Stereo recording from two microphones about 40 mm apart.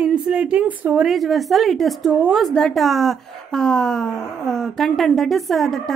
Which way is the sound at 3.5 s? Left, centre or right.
Centre.